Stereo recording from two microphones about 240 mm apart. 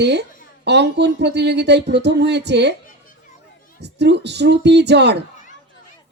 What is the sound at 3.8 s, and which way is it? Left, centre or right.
Speech, right.